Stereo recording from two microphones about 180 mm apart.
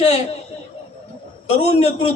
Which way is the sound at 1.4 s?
35° left (ahead or behind).